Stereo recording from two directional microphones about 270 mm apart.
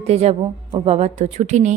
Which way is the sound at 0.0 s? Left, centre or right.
Right.